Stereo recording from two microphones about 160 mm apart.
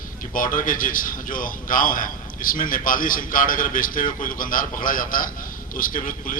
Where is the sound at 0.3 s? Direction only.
60° left (ahead or behind).